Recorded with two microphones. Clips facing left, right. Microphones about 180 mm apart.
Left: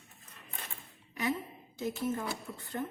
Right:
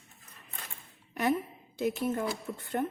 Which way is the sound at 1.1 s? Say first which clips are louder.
Right 5 dB; 60° right (ahead or behind).